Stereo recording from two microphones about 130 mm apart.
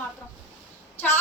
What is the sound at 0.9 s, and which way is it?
Speech, 15° left (ahead or behind).